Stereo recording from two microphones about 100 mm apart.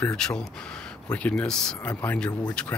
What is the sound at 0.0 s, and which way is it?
Speech, 10° left (ahead or behind).